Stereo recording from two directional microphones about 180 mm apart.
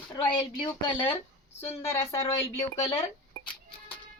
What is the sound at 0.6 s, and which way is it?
Speech, 25° left (ahead or behind).